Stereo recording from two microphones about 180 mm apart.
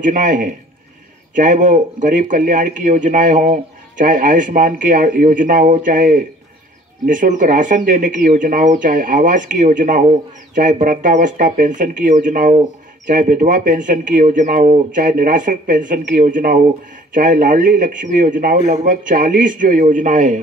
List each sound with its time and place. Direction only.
0.0 s speech: 45° right (ahead or behind)